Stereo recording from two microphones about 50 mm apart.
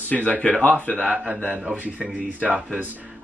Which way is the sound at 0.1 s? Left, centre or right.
Left.